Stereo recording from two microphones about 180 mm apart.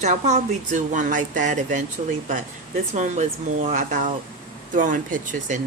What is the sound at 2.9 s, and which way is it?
A woman's voice, 40° right (ahead or behind).